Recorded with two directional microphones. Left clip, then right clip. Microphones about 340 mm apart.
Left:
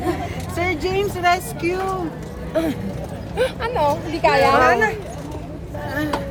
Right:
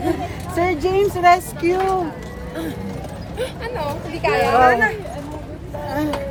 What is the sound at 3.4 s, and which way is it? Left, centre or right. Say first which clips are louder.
Speech: left 6 dB; centre.